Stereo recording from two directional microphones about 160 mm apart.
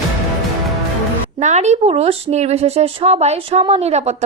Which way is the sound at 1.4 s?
45° right (ahead or behind).